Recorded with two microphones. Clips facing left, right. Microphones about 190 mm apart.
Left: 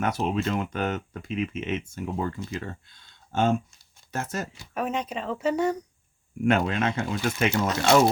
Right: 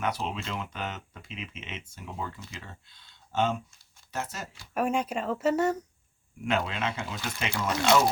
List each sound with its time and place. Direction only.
0.0 s speech: 50° left (ahead or behind)
4.7 s speech: 5° right (ahead or behind)
6.4 s speech: 50° left (ahead or behind)